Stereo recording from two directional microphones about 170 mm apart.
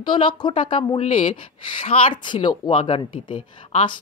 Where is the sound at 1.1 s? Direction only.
45° left (ahead or behind).